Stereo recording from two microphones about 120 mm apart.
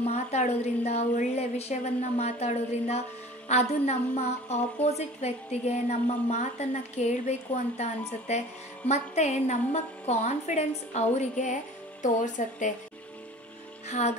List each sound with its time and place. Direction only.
0.0 s a woman's voice: 65° left (ahead or behind); by 12.7 s 90° left
13.8 s music: 70° left (ahead or behind)